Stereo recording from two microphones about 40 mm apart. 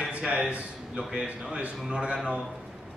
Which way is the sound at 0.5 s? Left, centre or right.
Right.